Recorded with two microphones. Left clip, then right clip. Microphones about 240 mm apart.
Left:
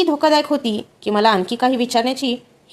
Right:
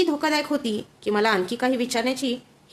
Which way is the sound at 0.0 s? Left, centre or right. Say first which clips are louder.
Left 7 dB; centre.